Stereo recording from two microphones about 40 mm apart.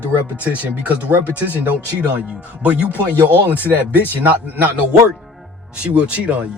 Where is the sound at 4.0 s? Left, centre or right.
Right.